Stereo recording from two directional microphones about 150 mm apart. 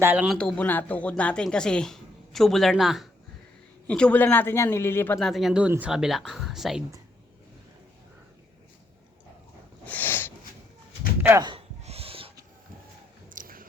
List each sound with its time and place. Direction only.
0.0 s speech: 15° right (ahead or behind)
0.3 s speech: 5° left (ahead or behind)
5.2 s speech: centre (ahead or behind)
9.8 s a sound: 10° left (ahead or behind)
11.3 s speech: 30° right (ahead or behind)
11.8 s owl: 40° right (ahead or behind)
13.3 s chewing: 65° right (ahead or behind)